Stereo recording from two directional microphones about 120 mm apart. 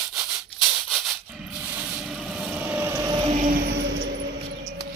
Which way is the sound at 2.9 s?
30° right (ahead or behind).